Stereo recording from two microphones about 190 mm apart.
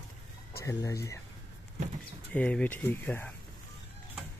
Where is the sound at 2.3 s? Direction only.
5° left (ahead or behind).